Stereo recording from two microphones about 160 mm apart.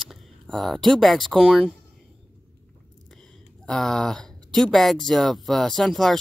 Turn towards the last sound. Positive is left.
turn(degrees=0)  # may be behind; listen again after turning